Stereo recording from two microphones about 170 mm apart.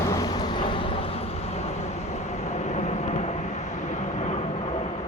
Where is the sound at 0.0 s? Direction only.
20° left (ahead or behind); by 4.9 s 35° left (ahead or behind).